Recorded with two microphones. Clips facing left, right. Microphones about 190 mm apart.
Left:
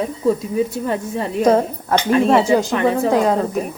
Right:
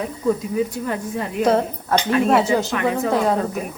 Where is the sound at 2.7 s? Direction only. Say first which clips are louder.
Left 4 dB; 30° left (ahead or behind).